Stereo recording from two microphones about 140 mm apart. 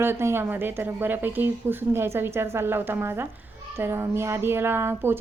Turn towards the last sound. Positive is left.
turn(degrees=-15)  # may be behind; listen again after turning